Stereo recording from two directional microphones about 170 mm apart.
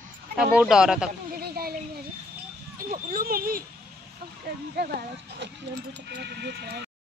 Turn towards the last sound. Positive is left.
turn(degrees=-75)  # may be behind; listen again after turning